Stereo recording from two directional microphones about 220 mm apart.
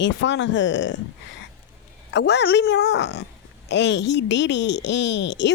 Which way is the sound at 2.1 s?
50° left (ahead or behind).